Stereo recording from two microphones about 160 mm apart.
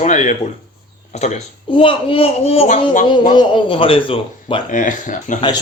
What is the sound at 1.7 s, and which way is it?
Speech, 35° left (ahead or behind).